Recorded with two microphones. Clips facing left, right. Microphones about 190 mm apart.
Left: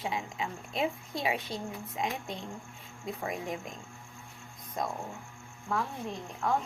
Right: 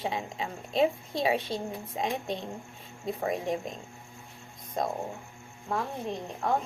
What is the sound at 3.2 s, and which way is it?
Speech, 30° right (ahead or behind).